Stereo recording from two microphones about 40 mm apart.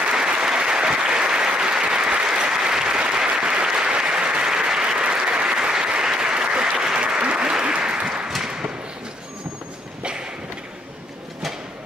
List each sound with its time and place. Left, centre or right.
0.0 s applause: centre
8.4 s thump: centre